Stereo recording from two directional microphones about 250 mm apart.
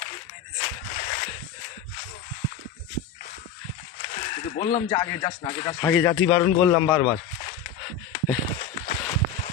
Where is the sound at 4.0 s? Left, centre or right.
Left.